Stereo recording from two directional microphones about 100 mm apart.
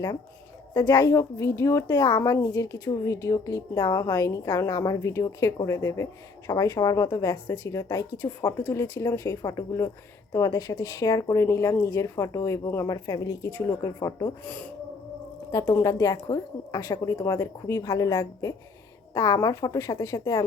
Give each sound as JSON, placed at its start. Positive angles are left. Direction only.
{"t": 0.7, "sound": "a woman's voice", "side_deg": 25}
{"t": 14.4, "sound": "speech", "side_deg": 15}
{"t": 15.5, "sound": "speech", "side_deg": 30}